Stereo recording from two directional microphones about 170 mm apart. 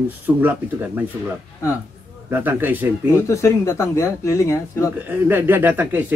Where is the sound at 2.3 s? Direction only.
10° right (ahead or behind).